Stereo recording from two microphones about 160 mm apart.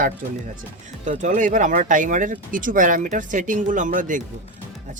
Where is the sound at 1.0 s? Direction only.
50° right (ahead or behind).